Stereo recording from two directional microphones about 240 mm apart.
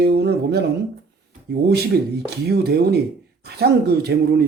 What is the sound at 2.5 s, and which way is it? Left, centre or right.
A man's voice, right.